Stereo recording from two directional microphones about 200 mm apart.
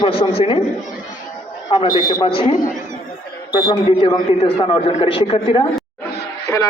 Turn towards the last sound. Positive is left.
turn(degrees=20)  # may be behind; listen again after turning